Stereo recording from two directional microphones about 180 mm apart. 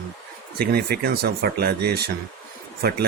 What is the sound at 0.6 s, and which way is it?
Speech, 60° right (ahead or behind).